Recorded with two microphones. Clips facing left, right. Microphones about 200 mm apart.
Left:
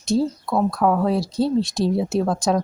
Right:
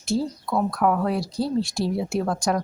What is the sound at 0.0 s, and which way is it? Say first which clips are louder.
Speech: left 4 dB; 20° left (ahead or behind).